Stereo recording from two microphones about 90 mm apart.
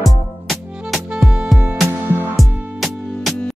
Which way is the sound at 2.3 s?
Centre (ahead or behind).